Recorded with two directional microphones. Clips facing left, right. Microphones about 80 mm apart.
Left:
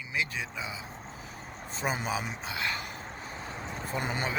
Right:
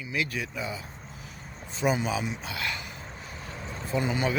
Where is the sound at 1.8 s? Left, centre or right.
Left.